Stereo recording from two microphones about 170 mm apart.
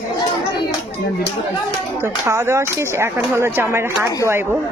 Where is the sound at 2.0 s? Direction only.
15° right (ahead or behind).